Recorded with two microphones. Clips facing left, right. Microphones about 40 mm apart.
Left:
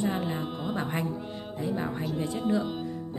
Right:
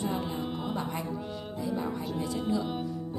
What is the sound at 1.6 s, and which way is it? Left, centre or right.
Music, left.